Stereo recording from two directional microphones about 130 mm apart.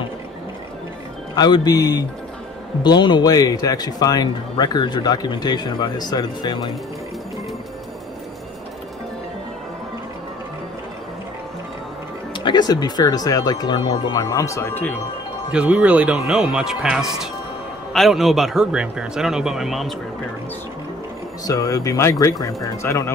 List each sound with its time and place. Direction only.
1.3 s speech: 30° left (ahead or behind)
12.4 s speech: 30° left (ahead or behind); by 15.0 s 15° left (ahead or behind)
15.5 s speech: 10° right (ahead or behind)
21.5 s speech: 25° left (ahead or behind)